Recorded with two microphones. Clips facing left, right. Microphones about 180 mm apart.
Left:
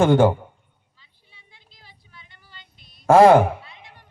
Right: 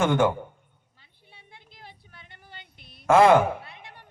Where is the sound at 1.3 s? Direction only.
60° right (ahead or behind).